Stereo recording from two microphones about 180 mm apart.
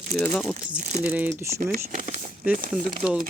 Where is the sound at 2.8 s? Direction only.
50° right (ahead or behind).